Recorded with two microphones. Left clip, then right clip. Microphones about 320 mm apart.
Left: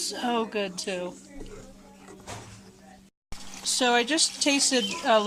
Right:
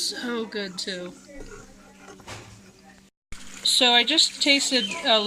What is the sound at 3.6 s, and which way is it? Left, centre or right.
Speech, centre.